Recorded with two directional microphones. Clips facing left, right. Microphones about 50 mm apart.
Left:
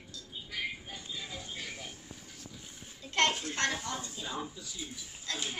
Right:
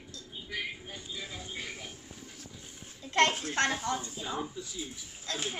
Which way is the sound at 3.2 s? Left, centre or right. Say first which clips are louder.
Right 3 dB; right.